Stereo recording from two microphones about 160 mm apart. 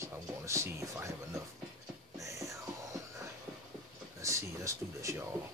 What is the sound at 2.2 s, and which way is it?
Whispering, 20° right (ahead or behind).